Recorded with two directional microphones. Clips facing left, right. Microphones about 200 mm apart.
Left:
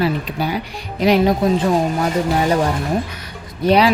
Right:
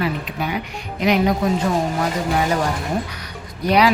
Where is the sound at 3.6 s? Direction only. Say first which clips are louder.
Left 3 dB; 30° left (ahead or behind).